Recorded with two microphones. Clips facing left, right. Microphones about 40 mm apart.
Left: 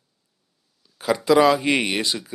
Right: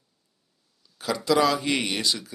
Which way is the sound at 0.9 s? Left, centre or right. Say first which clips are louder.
Left 5 dB; left.